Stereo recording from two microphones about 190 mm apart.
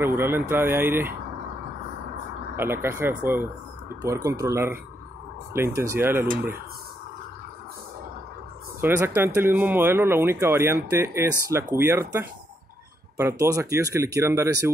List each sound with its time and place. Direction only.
0.0 s speech: 10° right (ahead or behind)
2.5 s speech: 10° right (ahead or behind)
8.8 s speech: 10° right (ahead or behind)